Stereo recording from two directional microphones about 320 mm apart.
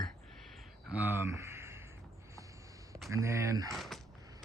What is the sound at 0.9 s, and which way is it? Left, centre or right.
Speech, centre.